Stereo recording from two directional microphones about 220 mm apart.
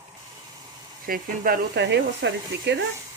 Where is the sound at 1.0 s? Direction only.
40° right (ahead or behind).